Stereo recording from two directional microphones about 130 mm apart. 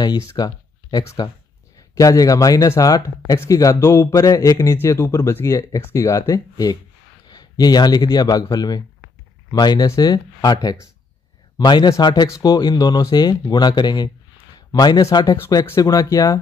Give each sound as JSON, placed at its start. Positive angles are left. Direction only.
{"t": 0.3, "sound": "a man's voice", "side_deg": 30}
{"t": 15.3, "sound": "speech", "side_deg": 20}